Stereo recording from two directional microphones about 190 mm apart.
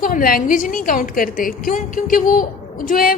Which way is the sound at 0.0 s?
50° left (ahead or behind).